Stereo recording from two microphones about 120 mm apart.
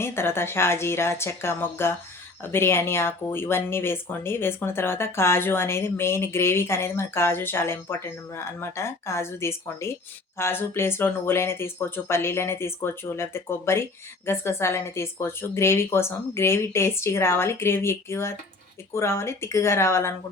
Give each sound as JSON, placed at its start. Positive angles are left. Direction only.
{"t": 0.0, "sound": "speech", "side_deg": 20}